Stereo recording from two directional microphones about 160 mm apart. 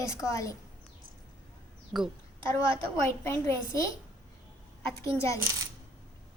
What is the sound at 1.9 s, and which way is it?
Speech, 5° right (ahead or behind).